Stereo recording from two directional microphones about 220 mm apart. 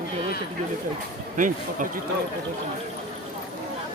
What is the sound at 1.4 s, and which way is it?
Speech, 35° right (ahead or behind).